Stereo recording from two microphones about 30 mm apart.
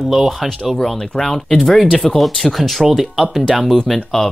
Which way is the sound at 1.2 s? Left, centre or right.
Centre.